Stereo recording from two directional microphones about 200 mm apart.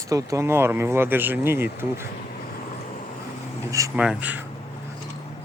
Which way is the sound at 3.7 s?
15° right (ahead or behind).